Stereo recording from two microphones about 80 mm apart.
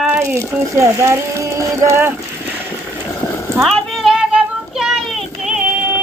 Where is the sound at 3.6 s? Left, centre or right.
Centre.